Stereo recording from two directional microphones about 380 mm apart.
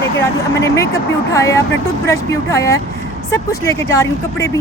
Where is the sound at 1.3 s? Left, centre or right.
Centre.